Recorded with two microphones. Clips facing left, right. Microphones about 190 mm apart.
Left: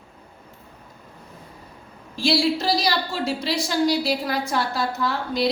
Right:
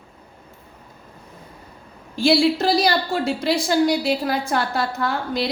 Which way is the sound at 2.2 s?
55° right (ahead or behind).